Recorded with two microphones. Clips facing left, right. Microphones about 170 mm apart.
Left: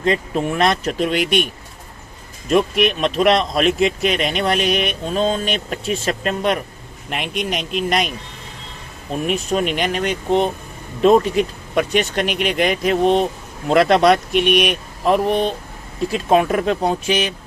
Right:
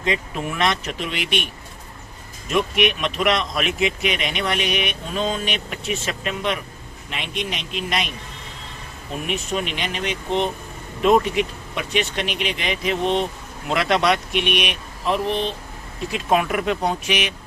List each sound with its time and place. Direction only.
0.0 s speech: 40° left (ahead or behind)
2.5 s speech: 35° left (ahead or behind)
16.1 s speech: 35° left (ahead or behind)